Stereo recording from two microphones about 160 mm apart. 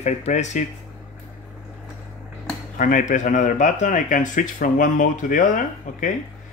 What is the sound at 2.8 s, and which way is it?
Speech, 55° left (ahead or behind).